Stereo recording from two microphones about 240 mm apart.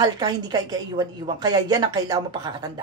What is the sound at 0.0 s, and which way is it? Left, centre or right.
A woman's voice, centre.